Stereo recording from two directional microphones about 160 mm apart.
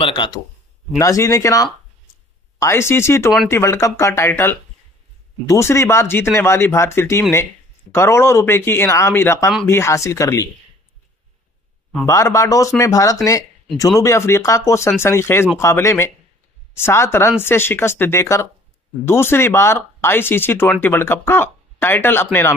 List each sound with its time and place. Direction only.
0.0 s speech: 30° left (ahead or behind)
0.9 s speech: 20° left (ahead or behind)
12.1 s speech: 20° left (ahead or behind)